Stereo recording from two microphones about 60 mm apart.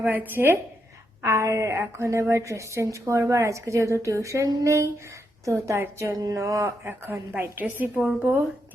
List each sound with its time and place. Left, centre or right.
0.0 s a woman's voice: right
1.2 s a woman's voice: right
6.2 s a woman's voice: right
7.0 s a woman's voice: right